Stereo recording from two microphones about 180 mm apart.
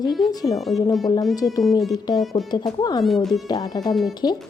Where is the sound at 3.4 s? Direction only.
20° left (ahead or behind).